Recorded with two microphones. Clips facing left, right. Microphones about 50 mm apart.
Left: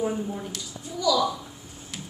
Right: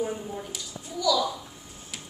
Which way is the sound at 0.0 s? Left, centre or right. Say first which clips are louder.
Left 3 dB; centre.